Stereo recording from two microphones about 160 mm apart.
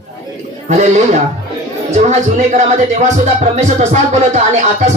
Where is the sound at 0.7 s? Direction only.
45° right (ahead or behind).